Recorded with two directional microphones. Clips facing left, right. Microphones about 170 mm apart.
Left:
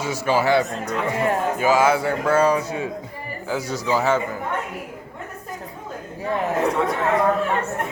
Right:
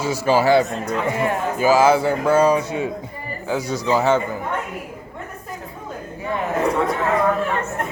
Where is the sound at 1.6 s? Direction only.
30° right (ahead or behind).